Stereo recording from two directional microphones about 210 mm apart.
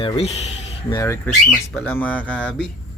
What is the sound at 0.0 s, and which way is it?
Speech, 25° left (ahead or behind).